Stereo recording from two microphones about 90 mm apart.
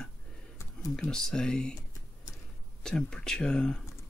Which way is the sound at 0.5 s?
35° left (ahead or behind).